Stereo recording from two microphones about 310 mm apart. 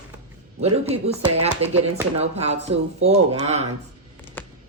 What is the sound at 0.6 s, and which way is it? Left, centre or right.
Speech, centre.